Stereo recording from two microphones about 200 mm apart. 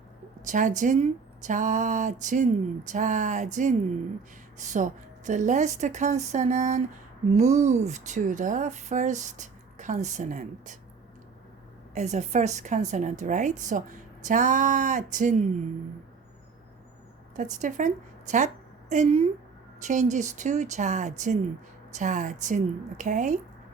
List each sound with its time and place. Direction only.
0.4 s speech: 40° right (ahead or behind)
11.9 s speech: 35° right (ahead or behind)
17.3 s a woman's voice: 40° right (ahead or behind)